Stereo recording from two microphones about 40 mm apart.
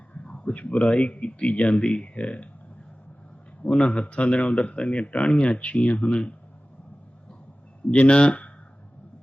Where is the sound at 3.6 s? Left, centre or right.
Left.